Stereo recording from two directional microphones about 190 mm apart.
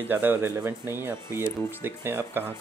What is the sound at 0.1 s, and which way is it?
Speech, 10° right (ahead or behind).